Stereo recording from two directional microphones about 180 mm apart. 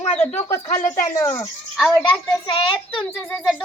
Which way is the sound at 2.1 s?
25° left (ahead or behind).